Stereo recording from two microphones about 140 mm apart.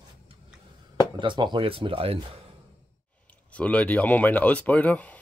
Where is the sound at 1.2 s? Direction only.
35° right (ahead or behind).